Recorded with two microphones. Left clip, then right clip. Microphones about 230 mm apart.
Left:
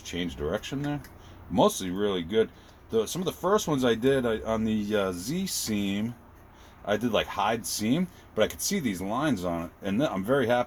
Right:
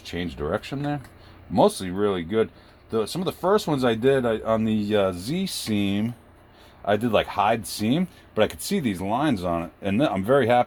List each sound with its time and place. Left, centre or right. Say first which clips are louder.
0.3 s speech: right 5 dB; right